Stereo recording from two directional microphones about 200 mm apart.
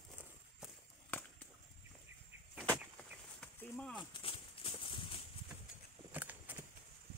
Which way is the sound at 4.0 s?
25° left (ahead or behind).